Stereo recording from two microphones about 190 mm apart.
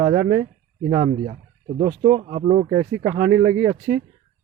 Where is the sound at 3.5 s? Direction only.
45° right (ahead or behind).